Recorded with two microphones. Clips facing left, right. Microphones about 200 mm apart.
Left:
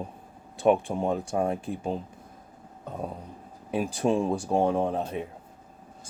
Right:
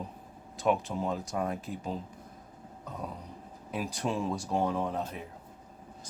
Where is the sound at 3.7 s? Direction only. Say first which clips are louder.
Left 8 dB; 30° left (ahead or behind).